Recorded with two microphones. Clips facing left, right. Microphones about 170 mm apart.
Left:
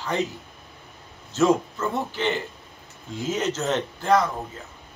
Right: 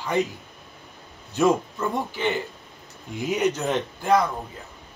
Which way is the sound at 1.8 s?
15° right (ahead or behind).